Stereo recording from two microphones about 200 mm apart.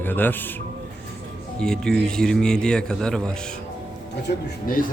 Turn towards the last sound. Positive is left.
turn(degrees=45)  # may be behind; listen again after turning